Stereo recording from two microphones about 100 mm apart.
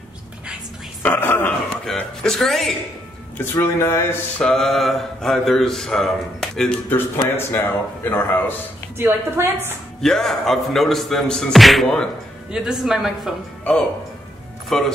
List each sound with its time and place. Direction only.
1.0 s a man's voice: 20° left (ahead or behind)
1.9 s speech: 5° left (ahead or behind)
3.6 s a man's voice: 25° left (ahead or behind)
4.4 s speech: 5° left (ahead or behind)
6.9 s a man's voice: 20° left (ahead or behind)
8.9 s a woman's voice: 25° right (ahead or behind)
10.0 s speech: 5° left (ahead or behind)
12.4 s speech: 5° right (ahead or behind)
14.7 s speech: 5° left (ahead or behind)